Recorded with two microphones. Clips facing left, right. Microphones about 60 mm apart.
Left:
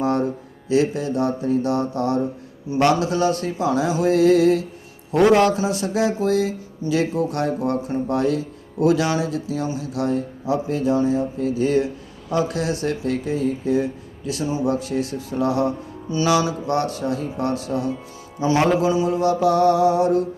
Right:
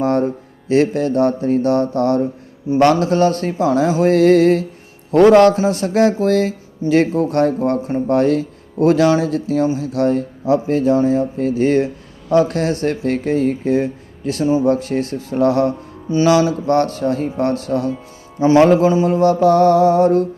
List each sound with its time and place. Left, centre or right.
0.0 s music: right
0.7 s speech: right
2.6 s speech: right
16.0 s speech: right
18.3 s speech: right